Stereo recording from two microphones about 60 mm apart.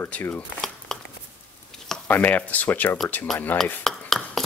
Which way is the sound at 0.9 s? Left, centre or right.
Centre.